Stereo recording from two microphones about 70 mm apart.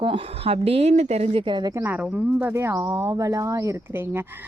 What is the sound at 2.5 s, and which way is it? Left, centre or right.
Speech, right.